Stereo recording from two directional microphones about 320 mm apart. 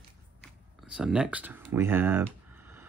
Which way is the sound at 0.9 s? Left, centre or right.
Centre.